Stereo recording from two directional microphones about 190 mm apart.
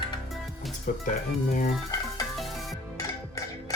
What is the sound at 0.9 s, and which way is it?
Speech, 45° left (ahead or behind).